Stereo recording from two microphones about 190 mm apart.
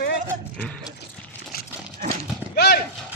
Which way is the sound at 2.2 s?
55° left (ahead or behind).